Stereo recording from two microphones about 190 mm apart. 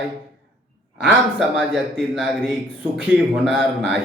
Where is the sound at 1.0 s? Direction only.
5° right (ahead or behind).